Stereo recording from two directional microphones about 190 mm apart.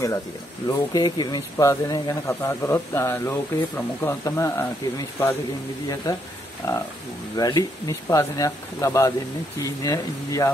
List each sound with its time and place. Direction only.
0.7 s speech: 20° left (ahead or behind)